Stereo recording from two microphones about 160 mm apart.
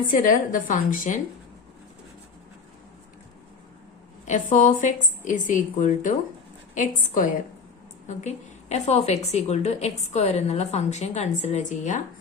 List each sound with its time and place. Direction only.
0.1 s a woman's voice: 60° left (ahead or behind)
4.3 s a woman's voice: 50° left (ahead or behind)